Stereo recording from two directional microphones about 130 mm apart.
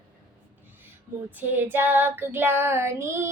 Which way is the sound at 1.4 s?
15° right (ahead or behind).